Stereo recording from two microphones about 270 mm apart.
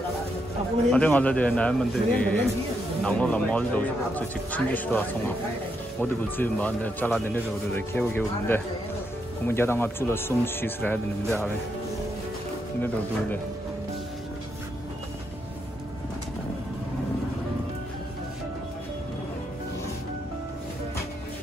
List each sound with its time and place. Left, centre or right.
0.9 s a man's voice: centre
12.8 s a man's voice: centre